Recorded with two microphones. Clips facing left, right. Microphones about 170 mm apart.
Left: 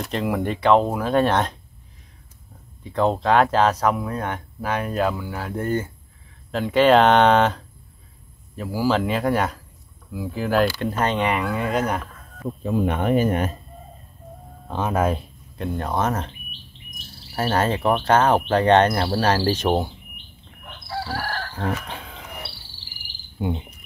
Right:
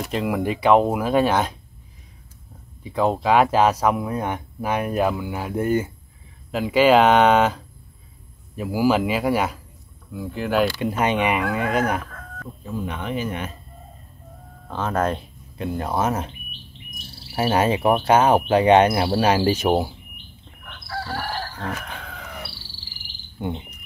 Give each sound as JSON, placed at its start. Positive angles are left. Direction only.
{"t": 0.0, "sound": "speech", "side_deg": -5}
{"t": 2.8, "sound": "speech", "side_deg": -5}
{"t": 10.8, "sound": "speech", "side_deg": -10}
{"t": 12.6, "sound": "speech", "side_deg": 60}
{"t": 14.7, "sound": "speech", "side_deg": 15}
{"t": 17.3, "sound": "speech", "side_deg": -10}
{"t": 21.0, "sound": "chicken", "side_deg": 5}
{"t": 21.5, "sound": "a sound", "side_deg": 30}
{"t": 22.9, "sound": "cricket", "side_deg": 10}